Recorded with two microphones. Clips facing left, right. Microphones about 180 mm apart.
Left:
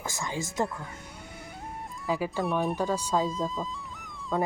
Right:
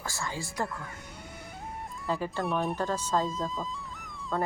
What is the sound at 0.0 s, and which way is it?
Speech, 20° left (ahead or behind).